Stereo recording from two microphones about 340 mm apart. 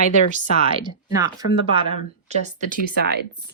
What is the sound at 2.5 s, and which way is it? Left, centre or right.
Speech, right.